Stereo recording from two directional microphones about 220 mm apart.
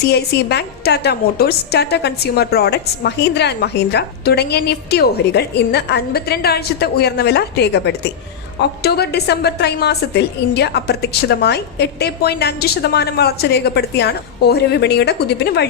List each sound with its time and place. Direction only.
0.0 s a woman's voice: 45° left (ahead or behind)